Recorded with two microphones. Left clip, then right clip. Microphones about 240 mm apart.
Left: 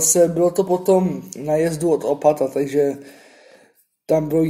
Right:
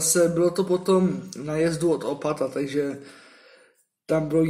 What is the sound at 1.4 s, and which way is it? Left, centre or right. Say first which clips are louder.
A man's voice: left 5 dB; centre.